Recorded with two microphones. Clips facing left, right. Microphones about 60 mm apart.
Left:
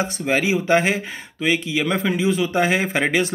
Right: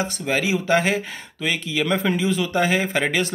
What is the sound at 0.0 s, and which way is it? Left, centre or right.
Speech, left.